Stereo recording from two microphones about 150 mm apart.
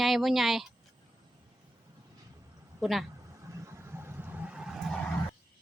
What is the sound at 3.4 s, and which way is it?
Vehicle, 20° right (ahead or behind).